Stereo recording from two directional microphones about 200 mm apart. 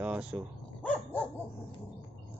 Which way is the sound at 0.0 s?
5° right (ahead or behind).